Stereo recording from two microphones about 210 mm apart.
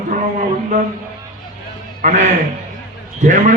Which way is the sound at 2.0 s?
35° right (ahead or behind).